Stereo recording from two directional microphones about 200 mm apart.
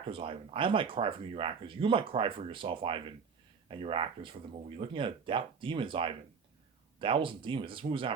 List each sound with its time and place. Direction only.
0.1 s speech: 25° right (ahead or behind)